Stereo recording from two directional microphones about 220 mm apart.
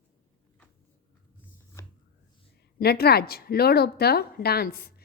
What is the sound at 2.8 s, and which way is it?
A woman's voice, 45° left (ahead or behind).